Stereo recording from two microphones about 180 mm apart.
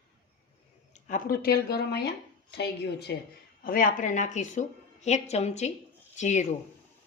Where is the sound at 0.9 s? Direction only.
45° left (ahead or behind); by 3.1 s 65° left (ahead or behind).